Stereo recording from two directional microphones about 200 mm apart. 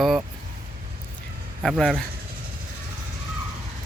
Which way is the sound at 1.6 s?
Centre (ahead or behind).